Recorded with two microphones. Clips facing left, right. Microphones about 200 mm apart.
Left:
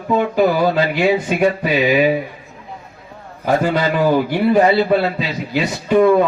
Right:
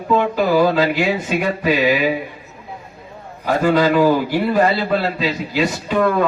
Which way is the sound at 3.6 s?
50° right (ahead or behind).